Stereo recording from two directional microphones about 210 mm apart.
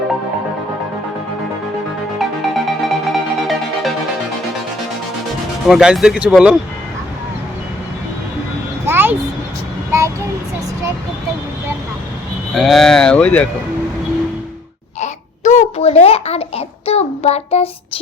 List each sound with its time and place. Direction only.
2.1 s music: centre (ahead or behind)
5.6 s speech: centre (ahead or behind)
8.9 s a sound: 10° right (ahead or behind)
12.5 s speech: centre (ahead or behind)
15.0 s babbling: 35° left (ahead or behind)